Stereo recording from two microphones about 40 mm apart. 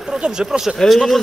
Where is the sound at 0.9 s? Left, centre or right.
Centre.